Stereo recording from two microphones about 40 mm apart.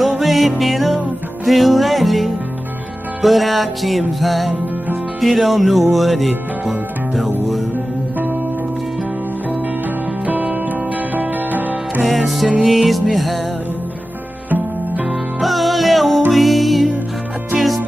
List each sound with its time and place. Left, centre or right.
0.2 s music: centre
10.2 s music: right
12.0 s music: centre
15.4 s music: centre